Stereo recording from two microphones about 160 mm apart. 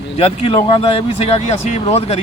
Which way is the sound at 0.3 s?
35° left (ahead or behind).